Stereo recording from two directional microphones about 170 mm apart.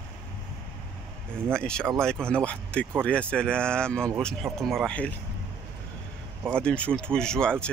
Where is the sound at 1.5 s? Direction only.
5° left (ahead or behind).